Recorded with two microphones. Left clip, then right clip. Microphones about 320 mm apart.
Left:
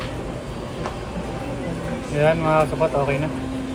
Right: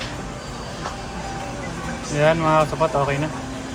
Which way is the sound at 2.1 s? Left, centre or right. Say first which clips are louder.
Right 1 dB; right.